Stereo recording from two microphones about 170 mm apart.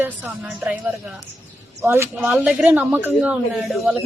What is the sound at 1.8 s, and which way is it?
A woman's voice, 15° right (ahead or behind).